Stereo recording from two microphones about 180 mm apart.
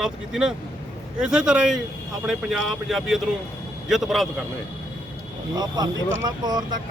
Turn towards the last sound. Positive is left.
turn(degrees=-25)  # may be behind; listen again after turning